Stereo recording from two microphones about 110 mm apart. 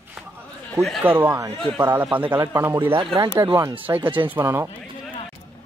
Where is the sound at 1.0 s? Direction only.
15° right (ahead or behind).